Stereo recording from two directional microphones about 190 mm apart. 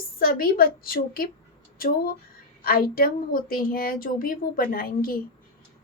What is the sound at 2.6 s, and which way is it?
A woman's voice, 50° left (ahead or behind).